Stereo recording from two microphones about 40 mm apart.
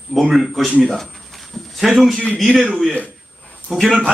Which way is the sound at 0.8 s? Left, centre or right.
Centre.